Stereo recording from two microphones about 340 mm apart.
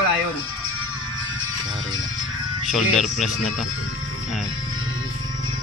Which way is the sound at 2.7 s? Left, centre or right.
Centre.